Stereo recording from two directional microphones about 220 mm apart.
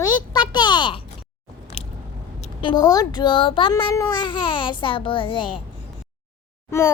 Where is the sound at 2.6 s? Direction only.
20° left (ahead or behind).